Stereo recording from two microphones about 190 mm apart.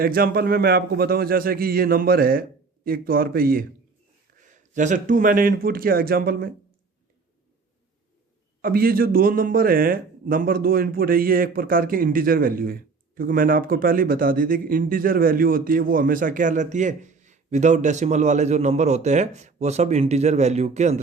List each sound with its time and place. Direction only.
0.0 s a man's voice: 50° right (ahead or behind)
8.6 s a man's voice: 50° right (ahead or behind); by 21.0 s 35° right (ahead or behind)